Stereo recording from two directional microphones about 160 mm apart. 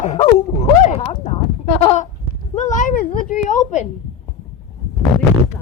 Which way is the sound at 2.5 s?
50° left (ahead or behind).